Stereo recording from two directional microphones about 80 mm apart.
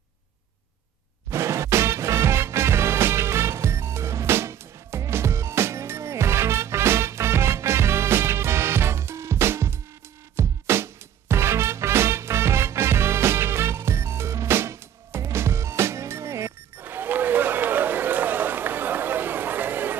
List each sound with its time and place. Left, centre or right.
1.3 s music: right